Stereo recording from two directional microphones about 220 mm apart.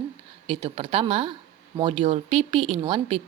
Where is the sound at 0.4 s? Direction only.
25° right (ahead or behind).